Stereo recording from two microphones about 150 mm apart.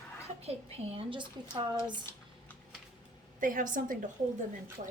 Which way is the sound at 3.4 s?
65° right (ahead or behind).